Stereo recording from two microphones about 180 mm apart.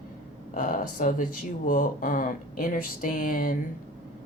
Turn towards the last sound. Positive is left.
turn(degrees=50)  # may be behind; listen again after turning